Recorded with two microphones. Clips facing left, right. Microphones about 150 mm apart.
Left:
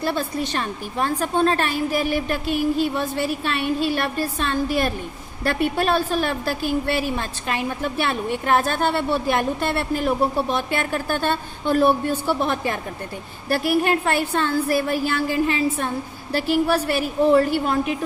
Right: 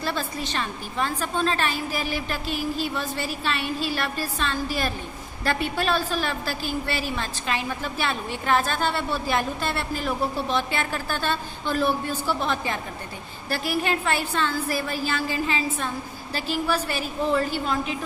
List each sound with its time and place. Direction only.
0.0 s a woman's voice: 55° left (ahead or behind)